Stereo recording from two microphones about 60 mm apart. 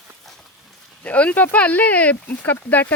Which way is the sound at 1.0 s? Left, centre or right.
Left.